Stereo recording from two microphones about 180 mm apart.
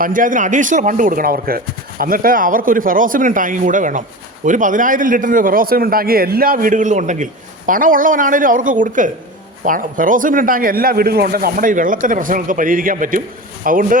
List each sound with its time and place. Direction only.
0.0 s speech: 50° right (ahead or behind)